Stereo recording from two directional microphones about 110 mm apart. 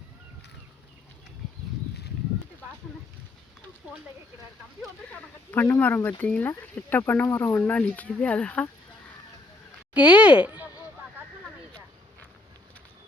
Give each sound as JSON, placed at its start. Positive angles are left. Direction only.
{"t": 5.1, "sound": "speech", "side_deg": 20}
{"t": 9.9, "sound": "speech", "side_deg": -10}